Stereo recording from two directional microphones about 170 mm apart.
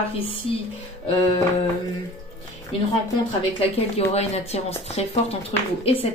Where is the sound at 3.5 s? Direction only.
35° left (ahead or behind).